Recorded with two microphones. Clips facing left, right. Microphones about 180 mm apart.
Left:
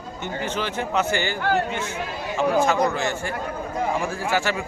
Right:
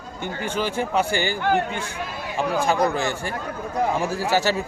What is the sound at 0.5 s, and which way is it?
A man's voice, 10° right (ahead or behind).